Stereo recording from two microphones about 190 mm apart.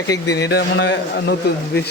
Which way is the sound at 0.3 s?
60° left (ahead or behind).